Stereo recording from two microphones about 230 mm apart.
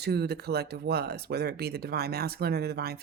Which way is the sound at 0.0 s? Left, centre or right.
Right.